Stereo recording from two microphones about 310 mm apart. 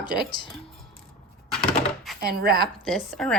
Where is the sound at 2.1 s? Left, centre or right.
Right.